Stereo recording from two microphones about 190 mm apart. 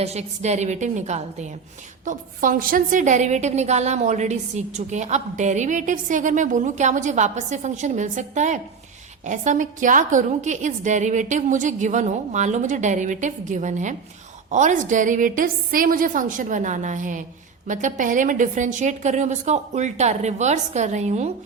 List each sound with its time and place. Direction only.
0.0 s a woman's voice: 35° right (ahead or behind)